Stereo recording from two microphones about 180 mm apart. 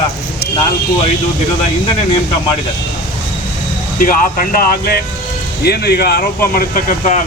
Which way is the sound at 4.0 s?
50° left (ahead or behind).